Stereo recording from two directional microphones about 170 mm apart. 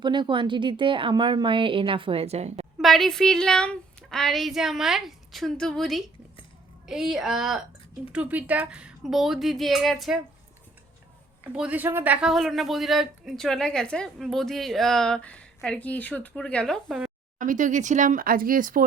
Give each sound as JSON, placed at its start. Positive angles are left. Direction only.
{"t": 0.0, "sound": "speech", "side_deg": -25}
{"t": 2.7, "sound": "speech", "side_deg": 0}
{"t": 11.5, "sound": "speech", "side_deg": -10}
{"t": 17.3, "sound": "speech", "side_deg": -50}